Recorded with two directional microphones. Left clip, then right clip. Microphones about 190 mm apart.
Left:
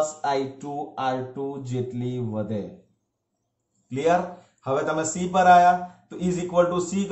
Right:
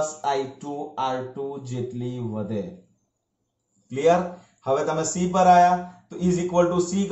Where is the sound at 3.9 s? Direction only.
20° right (ahead or behind).